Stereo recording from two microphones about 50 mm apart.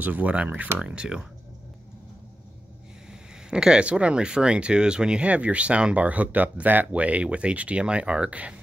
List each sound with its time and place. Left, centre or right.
0.0 s speech: right
0.7 s speech: centre
3.1 s speech: centre